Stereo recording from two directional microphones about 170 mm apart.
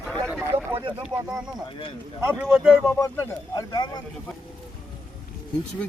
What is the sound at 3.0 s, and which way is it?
Speech, 15° left (ahead or behind).